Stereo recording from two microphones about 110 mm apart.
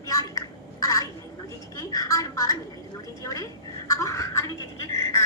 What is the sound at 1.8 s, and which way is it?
A woman's voice, 30° left (ahead or behind).